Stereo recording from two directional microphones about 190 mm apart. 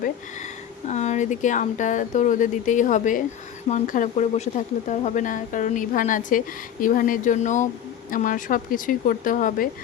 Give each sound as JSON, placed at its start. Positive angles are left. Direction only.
{"t": 0.9, "sound": "speech", "side_deg": 40}